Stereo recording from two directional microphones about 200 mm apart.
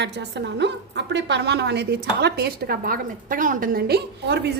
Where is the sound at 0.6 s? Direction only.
60° right (ahead or behind).